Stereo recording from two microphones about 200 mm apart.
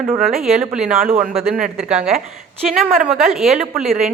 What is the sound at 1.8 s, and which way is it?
A woman's voice, 5° right (ahead or behind).